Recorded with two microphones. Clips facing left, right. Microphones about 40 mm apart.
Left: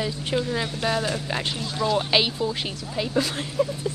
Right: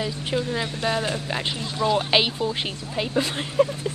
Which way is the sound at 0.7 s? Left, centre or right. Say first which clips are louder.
Right 1 dB; centre.